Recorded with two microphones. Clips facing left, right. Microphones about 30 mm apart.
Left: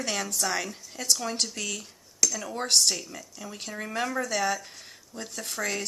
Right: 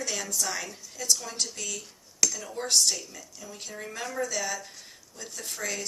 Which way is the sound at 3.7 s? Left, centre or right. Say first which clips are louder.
Left 4 dB; left.